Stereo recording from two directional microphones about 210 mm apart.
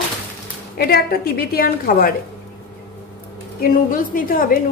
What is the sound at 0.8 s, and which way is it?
A woman's voice, 45° left (ahead or behind).